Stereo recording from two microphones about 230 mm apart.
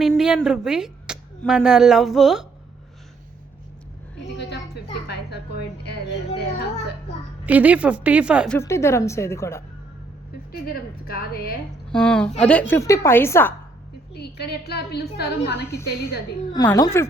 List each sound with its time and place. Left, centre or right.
0.0 s a woman's voice: centre
4.3 s a sound: left
6.3 s a child's voice: left
7.4 s a woman's voice: centre
8.5 s speech: centre
11.0 s a woman's voice: left
11.9 s speech: centre
14.1 s a woman's voice: left
15.6 s speech: centre